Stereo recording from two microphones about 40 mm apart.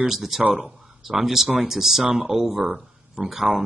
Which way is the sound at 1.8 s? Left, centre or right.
Centre.